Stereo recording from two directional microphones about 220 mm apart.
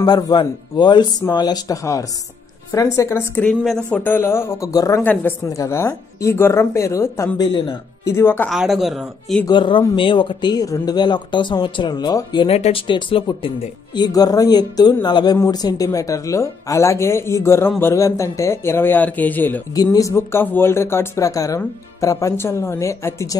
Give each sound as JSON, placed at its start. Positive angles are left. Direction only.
{"t": 0.0, "sound": "speech", "side_deg": 20}
{"t": 8.5, "sound": "speech", "side_deg": 0}
{"t": 9.5, "sound": "speech", "side_deg": 20}